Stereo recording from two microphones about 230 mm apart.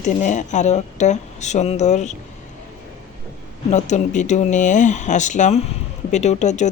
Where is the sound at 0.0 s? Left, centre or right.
Left.